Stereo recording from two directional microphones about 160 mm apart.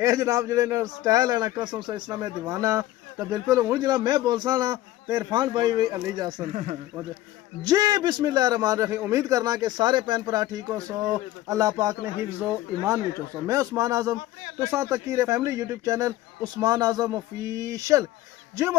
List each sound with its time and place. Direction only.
0.0 s speech: 20° right (ahead or behind)
6.5 s speech: 50° right (ahead or behind)
7.6 s speech: 25° right (ahead or behind)